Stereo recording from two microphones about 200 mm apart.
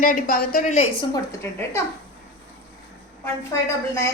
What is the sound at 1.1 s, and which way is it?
Speech, 15° left (ahead or behind).